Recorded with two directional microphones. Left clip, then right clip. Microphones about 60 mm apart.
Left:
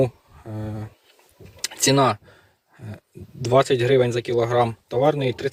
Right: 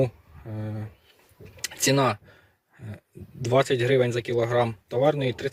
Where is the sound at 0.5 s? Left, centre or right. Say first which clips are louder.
Left 3 dB; left.